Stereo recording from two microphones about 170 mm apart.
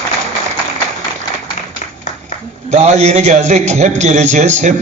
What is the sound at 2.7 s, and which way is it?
A man's voice, 40° right (ahead or behind).